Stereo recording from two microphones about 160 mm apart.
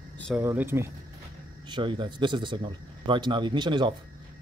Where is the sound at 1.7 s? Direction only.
30° right (ahead or behind).